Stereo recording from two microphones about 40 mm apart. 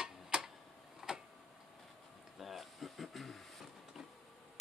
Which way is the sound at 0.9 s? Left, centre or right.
Centre.